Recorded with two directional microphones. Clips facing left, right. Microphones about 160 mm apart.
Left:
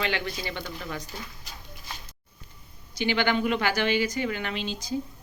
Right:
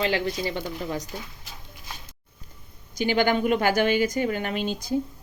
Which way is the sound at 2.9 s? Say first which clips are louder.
Right 3 dB; 45° right (ahead or behind).